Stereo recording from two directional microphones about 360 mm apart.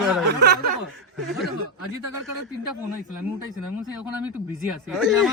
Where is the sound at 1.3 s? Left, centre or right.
Centre.